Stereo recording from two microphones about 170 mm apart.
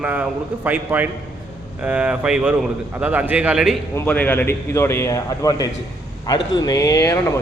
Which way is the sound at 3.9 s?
10° left (ahead or behind).